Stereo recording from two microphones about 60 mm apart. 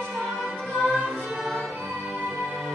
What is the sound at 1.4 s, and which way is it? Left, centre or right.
Music, centre.